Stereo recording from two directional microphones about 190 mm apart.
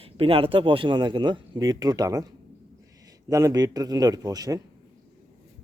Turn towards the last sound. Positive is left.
turn(degrees=-20)  # may be behind; listen again after turning